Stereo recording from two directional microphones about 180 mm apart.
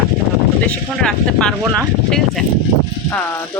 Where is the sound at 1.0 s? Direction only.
5° left (ahead or behind).